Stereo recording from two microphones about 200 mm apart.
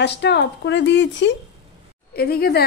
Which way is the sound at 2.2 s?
50° left (ahead or behind).